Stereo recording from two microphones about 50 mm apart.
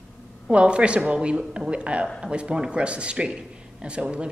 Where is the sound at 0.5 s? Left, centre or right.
Right.